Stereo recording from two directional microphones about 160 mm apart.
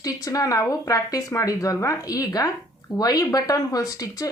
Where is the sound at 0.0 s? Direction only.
20° left (ahead or behind).